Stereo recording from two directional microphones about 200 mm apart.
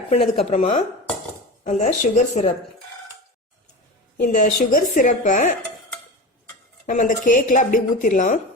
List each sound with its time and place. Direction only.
0.3 s speech: 30° left (ahead or behind)
4.2 s speech: 40° left (ahead or behind)
6.8 s speech: 40° left (ahead or behind)